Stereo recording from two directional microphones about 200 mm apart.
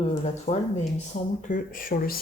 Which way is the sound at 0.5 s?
35° left (ahead or behind).